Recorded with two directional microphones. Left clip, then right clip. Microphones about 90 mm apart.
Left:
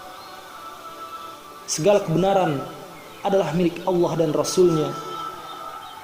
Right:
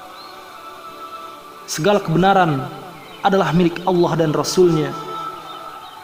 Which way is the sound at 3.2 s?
90° right.